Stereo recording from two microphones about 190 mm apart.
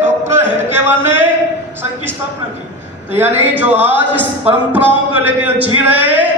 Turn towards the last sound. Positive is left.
turn(degrees=-10)  # may be behind; listen again after turning